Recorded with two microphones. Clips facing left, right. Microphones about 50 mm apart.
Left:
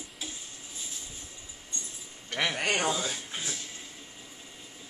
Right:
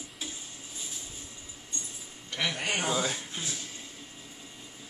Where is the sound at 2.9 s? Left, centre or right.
Right.